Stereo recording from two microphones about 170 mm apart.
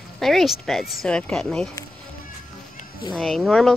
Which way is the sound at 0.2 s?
Centre (ahead or behind).